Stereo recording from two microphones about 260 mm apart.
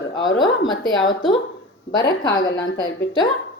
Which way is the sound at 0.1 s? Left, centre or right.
Centre.